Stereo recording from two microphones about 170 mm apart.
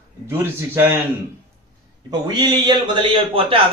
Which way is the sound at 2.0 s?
25° right (ahead or behind).